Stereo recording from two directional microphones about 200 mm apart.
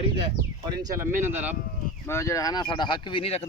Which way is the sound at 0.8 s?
15° right (ahead or behind).